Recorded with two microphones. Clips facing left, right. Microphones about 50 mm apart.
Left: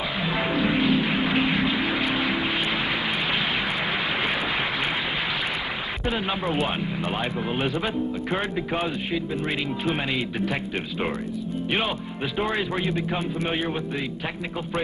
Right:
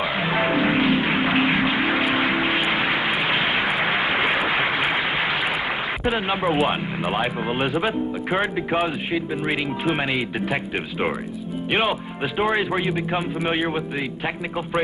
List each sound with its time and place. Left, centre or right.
0.2 s music: right
2.7 s vehicle: right
6.4 s speech: centre
10.1 s speech: centre
12.4 s speech: centre